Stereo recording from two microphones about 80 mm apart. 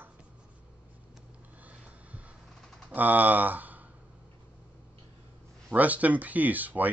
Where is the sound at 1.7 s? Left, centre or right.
Centre.